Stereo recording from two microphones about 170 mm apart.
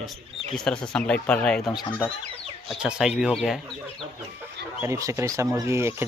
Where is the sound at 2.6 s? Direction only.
5° right (ahead or behind).